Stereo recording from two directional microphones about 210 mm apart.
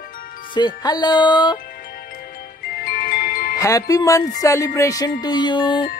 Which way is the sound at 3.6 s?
15° left (ahead or behind).